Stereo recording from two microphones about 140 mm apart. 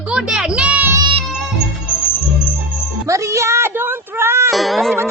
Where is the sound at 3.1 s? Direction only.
20° right (ahead or behind).